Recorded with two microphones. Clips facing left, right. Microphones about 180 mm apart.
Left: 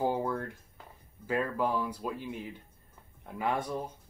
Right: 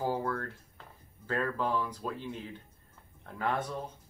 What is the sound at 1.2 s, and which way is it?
Speech, 10° left (ahead or behind).